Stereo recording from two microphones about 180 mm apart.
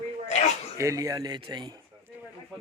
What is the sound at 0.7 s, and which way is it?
Speech, 15° right (ahead or behind).